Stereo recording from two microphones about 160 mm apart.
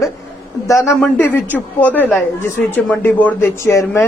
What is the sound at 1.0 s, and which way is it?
Speech, 10° left (ahead or behind).